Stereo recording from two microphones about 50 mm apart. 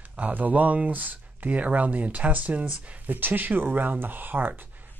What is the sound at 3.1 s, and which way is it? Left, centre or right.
Speech, right.